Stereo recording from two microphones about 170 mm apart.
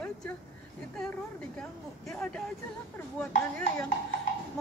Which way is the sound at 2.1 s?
5° left (ahead or behind).